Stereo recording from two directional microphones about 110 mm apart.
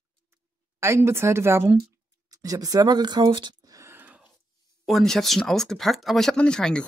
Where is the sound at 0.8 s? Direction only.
25° right (ahead or behind).